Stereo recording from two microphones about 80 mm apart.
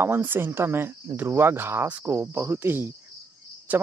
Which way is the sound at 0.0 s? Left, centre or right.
Right.